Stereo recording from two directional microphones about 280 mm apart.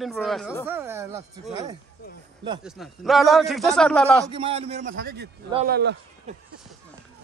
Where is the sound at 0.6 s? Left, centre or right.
Centre.